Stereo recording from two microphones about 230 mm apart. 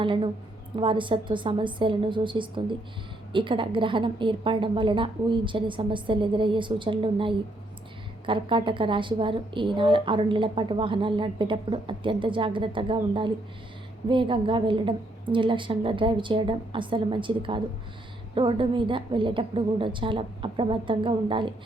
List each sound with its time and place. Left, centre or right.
0.0 s speech: right